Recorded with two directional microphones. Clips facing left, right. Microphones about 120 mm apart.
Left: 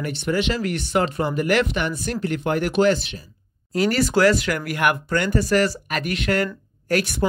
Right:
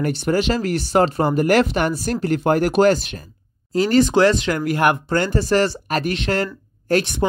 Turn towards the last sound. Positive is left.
turn(degrees=-25)  # may be behind; listen again after turning